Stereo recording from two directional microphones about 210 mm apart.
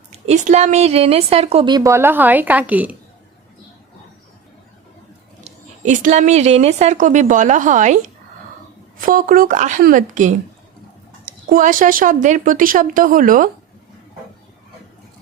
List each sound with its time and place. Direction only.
0.3 s a woman's voice: 30° right (ahead or behind); by 2.9 s 5° right (ahead or behind)
5.4 s speech: 35° right (ahead or behind)